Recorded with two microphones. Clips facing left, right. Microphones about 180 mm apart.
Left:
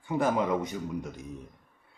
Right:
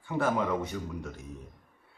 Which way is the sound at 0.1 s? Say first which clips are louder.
Left 2 dB; 15° left (ahead or behind).